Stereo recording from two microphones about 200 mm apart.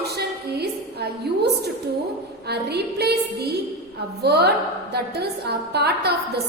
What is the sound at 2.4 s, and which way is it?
A woman's voice, 55° right (ahead or behind).